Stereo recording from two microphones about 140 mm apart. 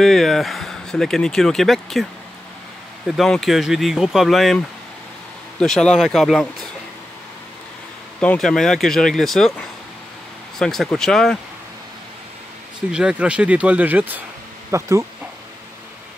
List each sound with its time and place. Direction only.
0.0 s speech: centre (ahead or behind)
3.1 s speech: centre (ahead or behind)
8.2 s speech: 5° left (ahead or behind)
12.9 s speech: 5° right (ahead or behind)